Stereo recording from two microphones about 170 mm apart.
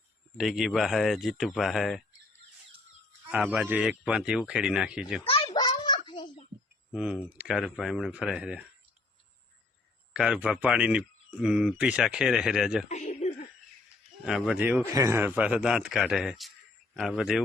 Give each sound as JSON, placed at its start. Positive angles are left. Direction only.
{"t": 0.3, "sound": "speech", "side_deg": 0}
{"t": 3.5, "sound": "speech", "side_deg": -5}
{"t": 5.3, "sound": "a sound", "side_deg": 30}
{"t": 6.9, "sound": "speech", "side_deg": -5}
{"t": 10.1, "sound": "speech", "side_deg": -5}
{"t": 12.9, "sound": "chuckle", "side_deg": 40}
{"t": 14.3, "sound": "speech", "side_deg": -5}